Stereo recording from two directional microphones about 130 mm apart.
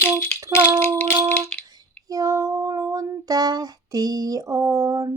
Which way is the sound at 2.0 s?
25° right (ahead or behind).